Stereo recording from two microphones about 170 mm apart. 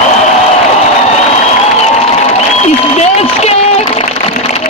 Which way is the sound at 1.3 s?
40° left (ahead or behind).